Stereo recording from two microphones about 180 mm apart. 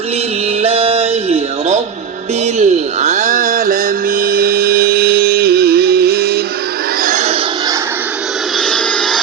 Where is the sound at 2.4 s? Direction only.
40° right (ahead or behind); by 6.4 s 60° right (ahead or behind).